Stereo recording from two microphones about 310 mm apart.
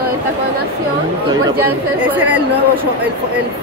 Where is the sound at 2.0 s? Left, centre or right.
Centre.